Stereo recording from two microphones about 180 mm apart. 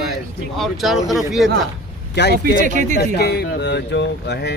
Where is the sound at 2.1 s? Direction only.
70° left (ahead or behind).